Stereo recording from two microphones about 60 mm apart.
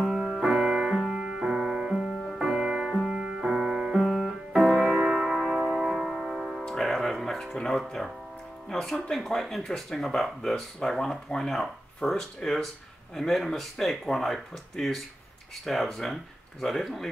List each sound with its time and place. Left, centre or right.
0.0 s music: centre
5.7 s tick-tock: centre
6.6 s music: centre
8.6 s speech: centre